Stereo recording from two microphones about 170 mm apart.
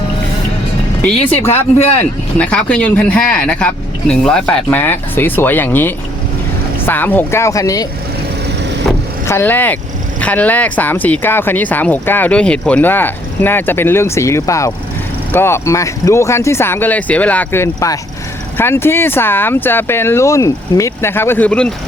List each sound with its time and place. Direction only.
1.4 s speech: 15° left (ahead or behind)
9.2 s speech: 15° left (ahead or behind)